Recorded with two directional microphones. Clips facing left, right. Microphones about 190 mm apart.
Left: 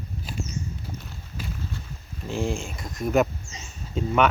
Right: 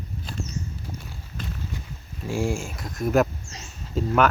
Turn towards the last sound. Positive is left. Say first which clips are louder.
# right 1 dB
turn(degrees=0)  # may be behind; listen again after turning